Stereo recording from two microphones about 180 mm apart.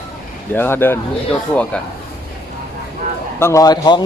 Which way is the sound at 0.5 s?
10° left (ahead or behind).